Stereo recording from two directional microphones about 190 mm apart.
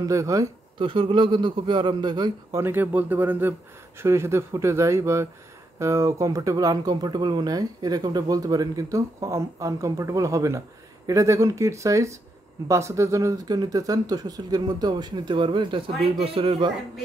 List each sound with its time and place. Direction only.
0.0 s speech: 15° right (ahead or behind)